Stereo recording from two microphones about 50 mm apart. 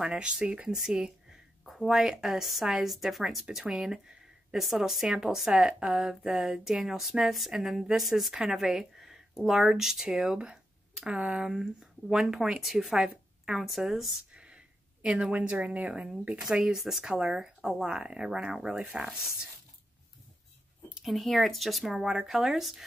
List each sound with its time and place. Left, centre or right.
0.0 s speech: centre
1.7 s speech: centre
14.3 s a sound: right
15.3 s speech: right
16.5 s speech: centre
21.0 s speech: centre